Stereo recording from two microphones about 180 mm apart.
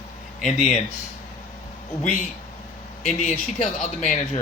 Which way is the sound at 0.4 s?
40° left (ahead or behind).